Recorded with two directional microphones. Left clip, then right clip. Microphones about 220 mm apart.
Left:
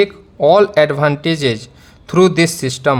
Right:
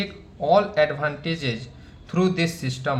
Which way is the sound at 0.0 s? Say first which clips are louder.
Left 14 dB; 50° left (ahead or behind).